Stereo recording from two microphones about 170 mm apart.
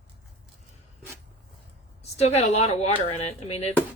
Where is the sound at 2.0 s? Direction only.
40° left (ahead or behind).